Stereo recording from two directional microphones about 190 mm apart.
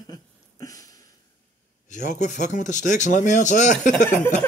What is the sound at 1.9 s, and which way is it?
Speech, 40° left (ahead or behind).